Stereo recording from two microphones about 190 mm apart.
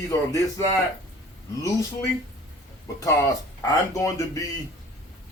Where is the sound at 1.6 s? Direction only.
15° left (ahead or behind).